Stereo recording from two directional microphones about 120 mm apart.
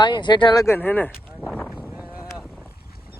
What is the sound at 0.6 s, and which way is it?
Speech, 20° left (ahead or behind).